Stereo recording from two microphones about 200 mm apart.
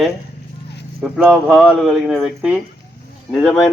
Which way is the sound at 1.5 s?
Centre (ahead or behind).